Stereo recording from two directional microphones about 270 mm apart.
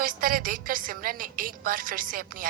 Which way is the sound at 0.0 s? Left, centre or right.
Right.